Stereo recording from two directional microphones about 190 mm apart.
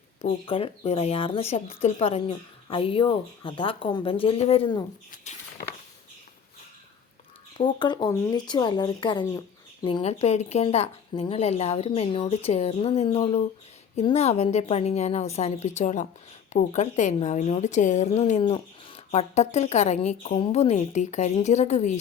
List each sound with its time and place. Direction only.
0.2 s speech: 30° left (ahead or behind)
7.6 s speech: 25° left (ahead or behind)